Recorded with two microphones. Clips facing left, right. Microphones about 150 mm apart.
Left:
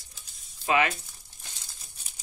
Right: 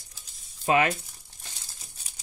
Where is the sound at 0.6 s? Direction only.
35° right (ahead or behind).